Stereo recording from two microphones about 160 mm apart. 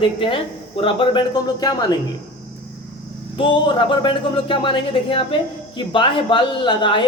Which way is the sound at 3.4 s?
30° left (ahead or behind).